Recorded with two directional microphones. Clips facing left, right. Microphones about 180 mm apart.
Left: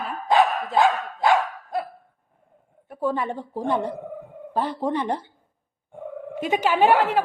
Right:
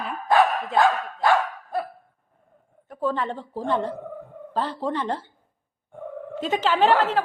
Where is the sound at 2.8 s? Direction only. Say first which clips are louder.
Left 1 dB; 10° left (ahead or behind).